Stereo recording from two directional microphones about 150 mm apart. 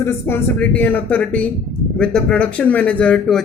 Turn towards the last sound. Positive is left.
turn(degrees=5)  # may be behind; listen again after turning